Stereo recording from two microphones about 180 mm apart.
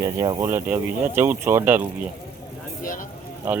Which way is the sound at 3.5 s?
10° right (ahead or behind).